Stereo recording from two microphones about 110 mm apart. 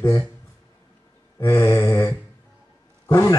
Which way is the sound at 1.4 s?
25° left (ahead or behind).